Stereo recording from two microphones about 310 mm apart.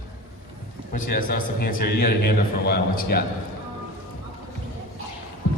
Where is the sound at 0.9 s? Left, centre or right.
Left.